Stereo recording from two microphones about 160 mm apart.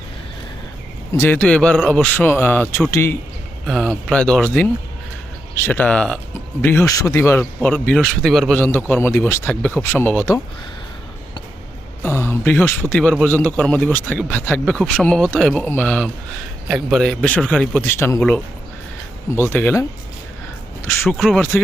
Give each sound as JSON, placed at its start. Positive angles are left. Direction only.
{"t": 1.1, "sound": "a man's voice", "side_deg": 15}
{"t": 3.7, "sound": "a man's voice", "side_deg": 5}
{"t": 12.0, "sound": "a man's voice", "side_deg": 15}
{"t": 19.4, "sound": "a man's voice", "side_deg": 15}
{"t": 20.8, "sound": "speech", "side_deg": 15}
{"t": 21.2, "sound": "speech", "side_deg": 0}